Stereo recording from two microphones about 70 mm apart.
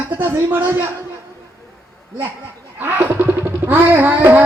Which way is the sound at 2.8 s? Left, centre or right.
Right.